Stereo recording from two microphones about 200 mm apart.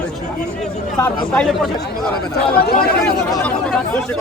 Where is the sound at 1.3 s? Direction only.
5° left (ahead or behind).